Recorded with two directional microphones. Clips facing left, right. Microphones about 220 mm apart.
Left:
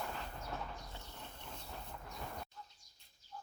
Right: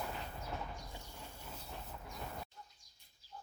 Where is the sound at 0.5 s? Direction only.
10° right (ahead or behind).